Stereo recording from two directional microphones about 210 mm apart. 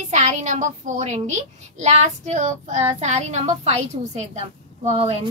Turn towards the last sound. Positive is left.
turn(degrees=-30)  # may be behind; listen again after turning